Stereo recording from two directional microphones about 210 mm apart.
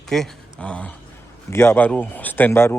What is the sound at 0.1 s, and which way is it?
Speech, 5° left (ahead or behind).